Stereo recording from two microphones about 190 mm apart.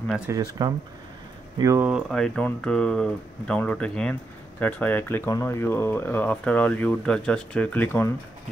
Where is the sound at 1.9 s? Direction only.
Centre (ahead or behind).